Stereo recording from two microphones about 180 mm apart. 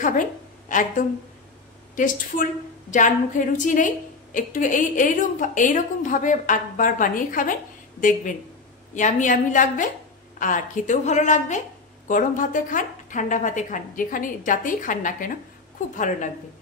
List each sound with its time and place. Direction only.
0.7 s a woman's voice: 45° left (ahead or behind)